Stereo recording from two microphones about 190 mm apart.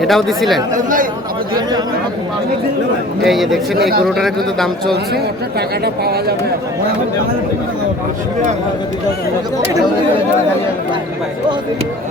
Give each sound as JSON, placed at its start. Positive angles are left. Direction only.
{"t": 0.0, "sound": "a man's voice", "side_deg": 0}
{"t": 0.7, "sound": "speech", "side_deg": -45}
{"t": 3.2, "sound": "a man's voice", "side_deg": 0}
{"t": 3.8, "sound": "speech", "side_deg": -55}
{"t": 4.0, "sound": "a man's voice", "side_deg": 0}
{"t": 5.1, "sound": "speech", "side_deg": -55}